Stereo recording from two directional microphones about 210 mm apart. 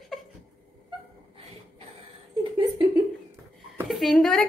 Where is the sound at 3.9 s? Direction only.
Centre (ahead or behind).